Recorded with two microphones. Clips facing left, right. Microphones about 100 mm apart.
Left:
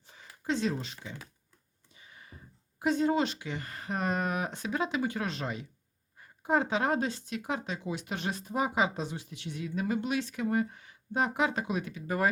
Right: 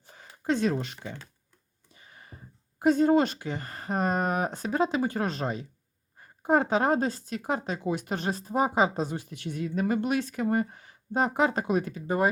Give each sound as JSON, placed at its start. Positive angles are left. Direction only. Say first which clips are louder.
{"t": 0.1, "sound": "a sound", "louder": "right 5 dB", "side_deg": -50}
{"t": 2.0, "sound": "speech", "louder": "right 2 dB", "side_deg": -45}
{"t": 12.0, "sound": "speech", "louder": "right 3 dB", "side_deg": -25}